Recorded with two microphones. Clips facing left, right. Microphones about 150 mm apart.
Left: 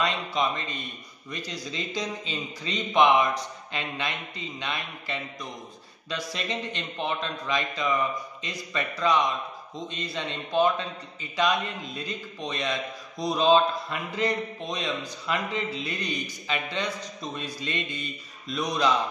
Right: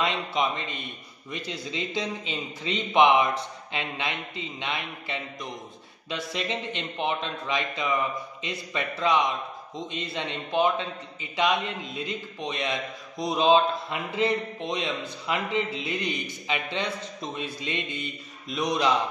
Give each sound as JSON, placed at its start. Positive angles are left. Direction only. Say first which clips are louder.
{"t": 0.0, "sound": "a man's voice", "louder": "even", "side_deg": -20}